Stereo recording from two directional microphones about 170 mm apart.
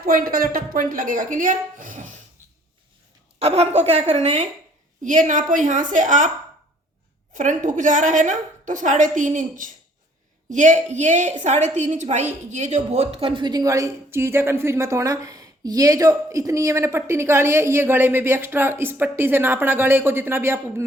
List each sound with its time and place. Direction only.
0.0 s speech: 60° right (ahead or behind)
3.3 s a woman's voice: 35° right (ahead or behind)
7.3 s a woman's voice: 50° right (ahead or behind); by 20.8 s 15° right (ahead or behind)